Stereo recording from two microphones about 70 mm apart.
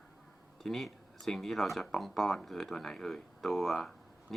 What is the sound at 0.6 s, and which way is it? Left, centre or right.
Speech, centre.